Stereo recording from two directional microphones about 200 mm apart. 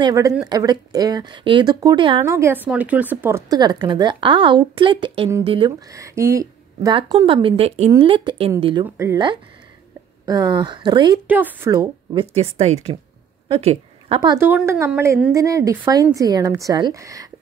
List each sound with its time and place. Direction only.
0.0 s speech: 15° right (ahead or behind)
2.3 s speech: 10° right (ahead or behind); by 8.8 s 25° right (ahead or behind)
8.8 s speech: 15° right (ahead or behind)
11.2 s a woman's voice: 10° right (ahead or behind); by 14.4 s 25° right (ahead or behind)
14.4 s speech: 10° right (ahead or behind)